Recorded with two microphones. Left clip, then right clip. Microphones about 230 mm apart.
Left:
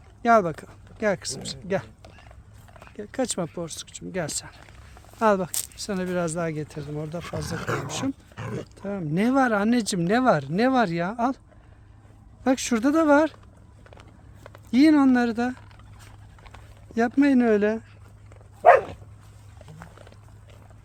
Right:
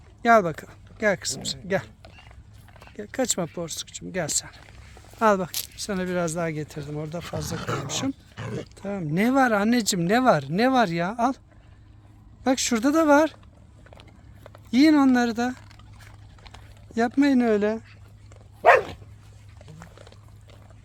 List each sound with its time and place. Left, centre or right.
0.2 s speech: centre
2.9 s speech: centre
7.5 s speech: left
7.9 s speech: centre
12.4 s speech: centre
14.7 s speech: centre
17.2 s speech: centre
18.6 s dog: right